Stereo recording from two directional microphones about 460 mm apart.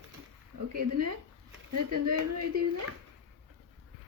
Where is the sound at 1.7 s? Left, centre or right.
Right.